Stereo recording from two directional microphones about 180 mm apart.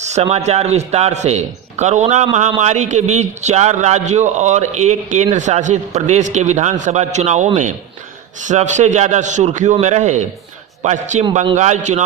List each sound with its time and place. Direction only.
0.0 s a man's voice: 35° right (ahead or behind)